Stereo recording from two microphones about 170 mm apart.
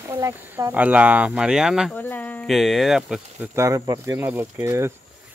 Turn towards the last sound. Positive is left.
turn(degrees=-15)  # may be behind; listen again after turning